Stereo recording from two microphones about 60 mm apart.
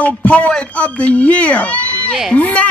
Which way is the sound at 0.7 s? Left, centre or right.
Left.